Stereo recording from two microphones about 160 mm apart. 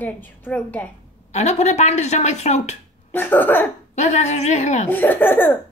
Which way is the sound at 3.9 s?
50° left (ahead or behind).